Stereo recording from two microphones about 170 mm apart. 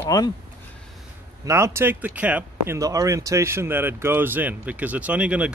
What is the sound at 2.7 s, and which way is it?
Speech, 20° right (ahead or behind).